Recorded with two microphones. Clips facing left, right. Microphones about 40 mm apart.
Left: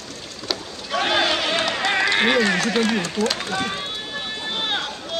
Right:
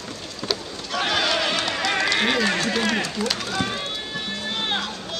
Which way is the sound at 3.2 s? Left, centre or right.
Centre.